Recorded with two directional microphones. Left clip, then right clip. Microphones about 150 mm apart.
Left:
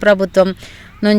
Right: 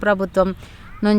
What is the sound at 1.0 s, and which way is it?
Speech, 5° left (ahead or behind).